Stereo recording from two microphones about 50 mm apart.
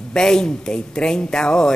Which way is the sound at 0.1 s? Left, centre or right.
Centre.